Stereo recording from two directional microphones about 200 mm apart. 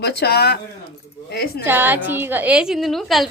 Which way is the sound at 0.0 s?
55° left (ahead or behind).